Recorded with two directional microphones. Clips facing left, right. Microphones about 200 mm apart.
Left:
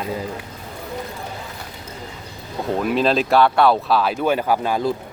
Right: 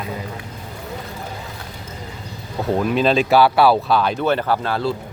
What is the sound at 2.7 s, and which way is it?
Speech, centre (ahead or behind).